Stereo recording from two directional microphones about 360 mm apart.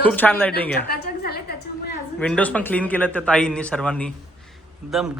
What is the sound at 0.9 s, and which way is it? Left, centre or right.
Speech, left.